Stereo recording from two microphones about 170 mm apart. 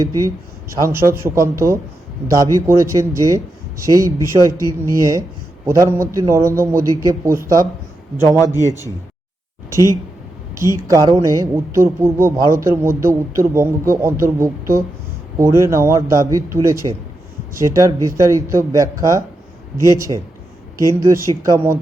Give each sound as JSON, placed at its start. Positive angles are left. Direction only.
{"t": 0.7, "sound": "a woman's voice", "side_deg": -15}
{"t": 10.5, "sound": "a woman's voice", "side_deg": -15}